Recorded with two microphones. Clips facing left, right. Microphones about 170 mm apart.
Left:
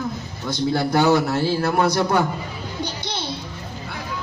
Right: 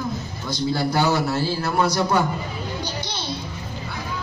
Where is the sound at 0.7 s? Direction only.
55° left (ahead or behind).